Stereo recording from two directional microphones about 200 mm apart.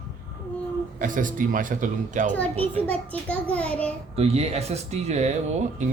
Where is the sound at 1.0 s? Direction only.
40° right (ahead or behind).